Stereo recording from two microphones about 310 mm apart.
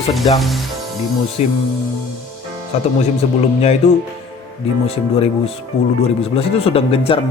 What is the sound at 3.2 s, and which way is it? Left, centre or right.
Speech, centre.